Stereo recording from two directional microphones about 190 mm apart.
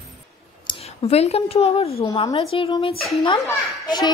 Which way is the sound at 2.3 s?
30° left (ahead or behind).